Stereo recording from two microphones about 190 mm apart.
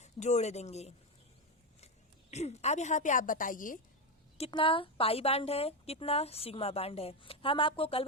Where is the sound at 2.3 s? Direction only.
35° left (ahead or behind).